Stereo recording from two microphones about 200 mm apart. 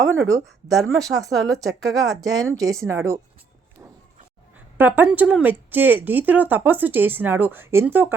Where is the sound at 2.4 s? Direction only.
15° right (ahead or behind).